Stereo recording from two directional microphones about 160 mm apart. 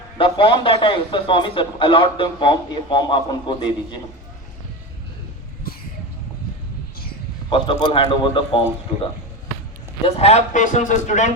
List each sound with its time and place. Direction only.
0.2 s a man's voice: 35° left (ahead or behind)
5.7 s vehicle: 70° left (ahead or behind)
7.5 s a man's voice: 35° left (ahead or behind)
10.0 s a man's voice: 40° left (ahead or behind)